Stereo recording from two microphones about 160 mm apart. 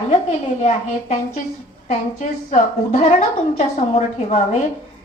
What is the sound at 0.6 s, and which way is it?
A woman's voice, 45° left (ahead or behind).